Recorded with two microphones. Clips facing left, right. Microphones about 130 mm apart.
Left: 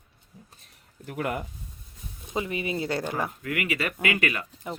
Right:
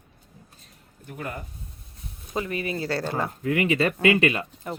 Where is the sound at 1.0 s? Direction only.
70° left (ahead or behind).